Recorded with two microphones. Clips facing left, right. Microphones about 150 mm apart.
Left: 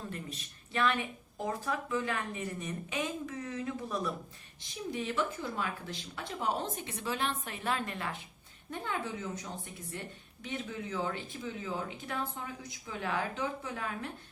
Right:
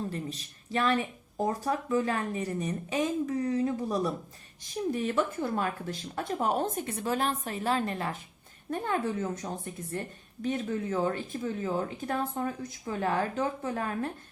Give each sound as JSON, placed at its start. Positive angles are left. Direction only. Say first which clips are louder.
{"t": 0.1, "sound": "speech", "louder": "right 6 dB", "side_deg": -35}
{"t": 4.9, "sound": "speech", "louder": "right 5 dB", "side_deg": -45}
{"t": 8.7, "sound": "speech", "louder": "right 7 dB", "side_deg": -50}